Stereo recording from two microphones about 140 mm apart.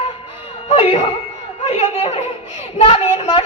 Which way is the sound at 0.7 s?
45° left (ahead or behind).